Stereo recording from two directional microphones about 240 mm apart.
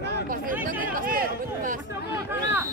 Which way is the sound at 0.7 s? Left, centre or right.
Right.